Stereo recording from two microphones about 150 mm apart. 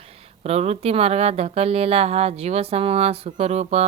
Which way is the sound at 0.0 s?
40° right (ahead or behind).